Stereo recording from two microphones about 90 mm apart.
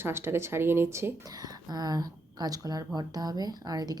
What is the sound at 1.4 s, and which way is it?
A woman's voice, 45° right (ahead or behind).